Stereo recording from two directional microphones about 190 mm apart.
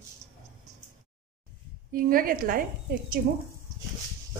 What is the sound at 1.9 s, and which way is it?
Speech, 50° right (ahead or behind).